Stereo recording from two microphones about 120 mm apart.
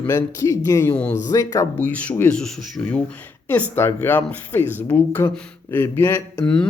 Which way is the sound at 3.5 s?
15° left (ahead or behind).